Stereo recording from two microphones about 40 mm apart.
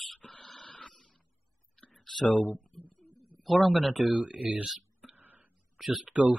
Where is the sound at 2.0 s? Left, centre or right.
Centre.